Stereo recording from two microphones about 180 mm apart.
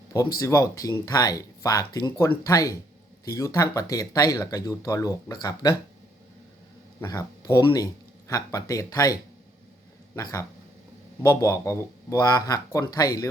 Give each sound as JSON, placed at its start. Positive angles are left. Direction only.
{"t": 0.3, "sound": "speech", "side_deg": 20}
{"t": 7.0, "sound": "speech", "side_deg": 20}
{"t": 10.2, "sound": "speech", "side_deg": 20}